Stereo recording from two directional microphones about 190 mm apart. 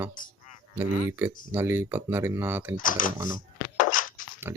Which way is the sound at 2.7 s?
45° left (ahead or behind).